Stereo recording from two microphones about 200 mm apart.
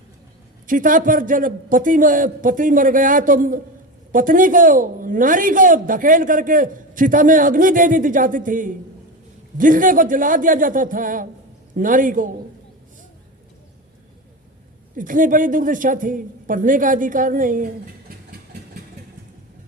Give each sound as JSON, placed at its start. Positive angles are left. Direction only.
{"t": 0.7, "sound": "a woman's voice", "side_deg": -40}
{"t": 14.9, "sound": "a woman's voice", "side_deg": -40}